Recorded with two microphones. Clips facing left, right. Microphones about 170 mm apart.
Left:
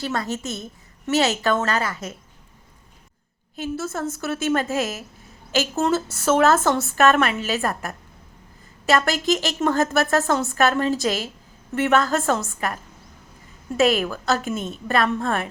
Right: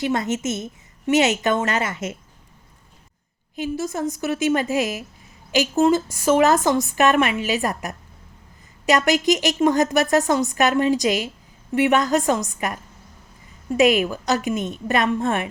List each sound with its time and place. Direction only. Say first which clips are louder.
0.0 s a woman's voice: right 4 dB; 20° right (ahead or behind)
3.6 s a woman's voice: right 2 dB; 15° right (ahead or behind)
13.7 s a woman's voice: right 2 dB; 15° right (ahead or behind)